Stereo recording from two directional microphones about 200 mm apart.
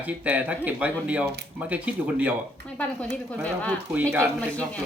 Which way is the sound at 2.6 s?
5° left (ahead or behind).